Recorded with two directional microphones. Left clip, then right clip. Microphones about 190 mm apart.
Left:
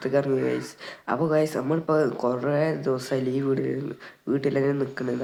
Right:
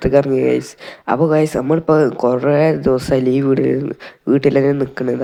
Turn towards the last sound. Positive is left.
turn(degrees=-30)  # may be behind; listen again after turning